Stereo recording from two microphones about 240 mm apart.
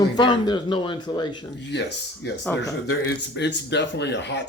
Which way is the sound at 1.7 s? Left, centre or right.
Left.